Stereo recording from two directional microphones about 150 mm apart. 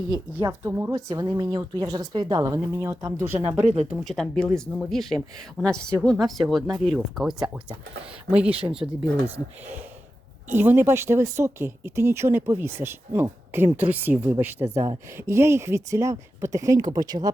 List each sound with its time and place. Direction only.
0.3 s speech: 20° right (ahead or behind)
4.0 s speech: 5° left (ahead or behind)
10.5 s speech: 15° right (ahead or behind)